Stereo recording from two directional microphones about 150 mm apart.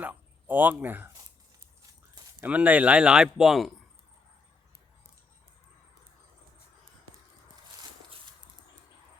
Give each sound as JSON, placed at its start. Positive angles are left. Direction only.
{"t": 0.0, "sound": "speech", "side_deg": -10}
{"t": 2.4, "sound": "speech", "side_deg": -10}